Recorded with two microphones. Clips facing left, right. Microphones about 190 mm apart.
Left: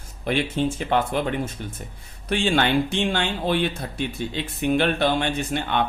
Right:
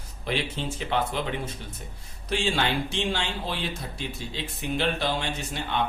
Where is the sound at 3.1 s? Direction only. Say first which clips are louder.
Left 7 dB; 60° left (ahead or behind).